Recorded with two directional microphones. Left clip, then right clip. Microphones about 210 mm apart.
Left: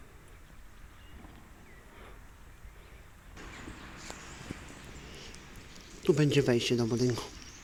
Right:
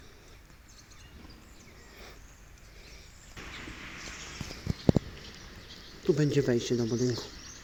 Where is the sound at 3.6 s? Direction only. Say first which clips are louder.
Right 5 dB; 30° left (ahead or behind).